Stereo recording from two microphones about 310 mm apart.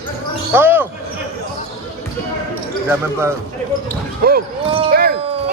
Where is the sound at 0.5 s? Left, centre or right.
Centre.